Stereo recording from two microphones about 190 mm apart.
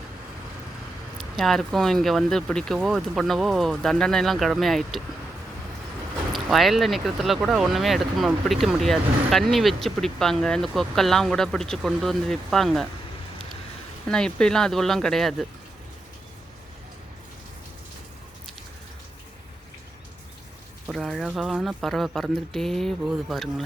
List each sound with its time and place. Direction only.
1.2 s speech: centre (ahead or behind)
6.3 s speech: centre (ahead or behind)
14.1 s speech: 5° left (ahead or behind)
20.8 s speech: centre (ahead or behind)